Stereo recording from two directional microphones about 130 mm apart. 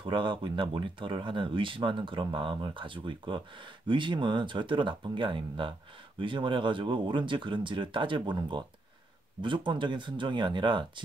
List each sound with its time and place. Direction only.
0.0 s speech: 40° right (ahead or behind)